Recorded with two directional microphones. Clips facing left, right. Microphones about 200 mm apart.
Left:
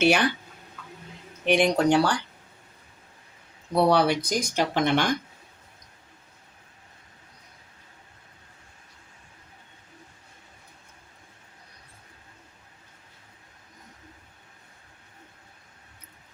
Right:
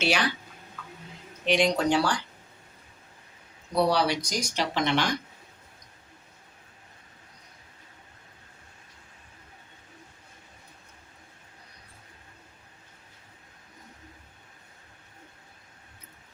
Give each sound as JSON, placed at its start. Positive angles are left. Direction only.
{"t": 0.0, "sound": "speech", "side_deg": 55}
{"t": 1.5, "sound": "speech", "side_deg": 55}
{"t": 3.8, "sound": "speech", "side_deg": 55}